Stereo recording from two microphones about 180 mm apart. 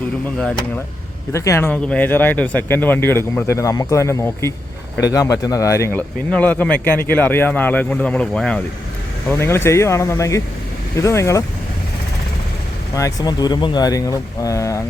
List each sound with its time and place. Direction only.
1.3 s speech: 15° left (ahead or behind)
13.0 s speech: 20° left (ahead or behind)